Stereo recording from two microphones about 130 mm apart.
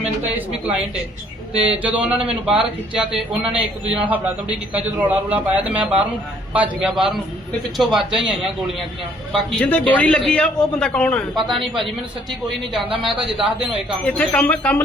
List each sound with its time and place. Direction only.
0.0 s a man's voice: 10° right (ahead or behind)
12.8 s a man's voice: 45° right (ahead or behind)
13.1 s a man's voice: 5° right (ahead or behind)
14.0 s a man's voice: 10° left (ahead or behind)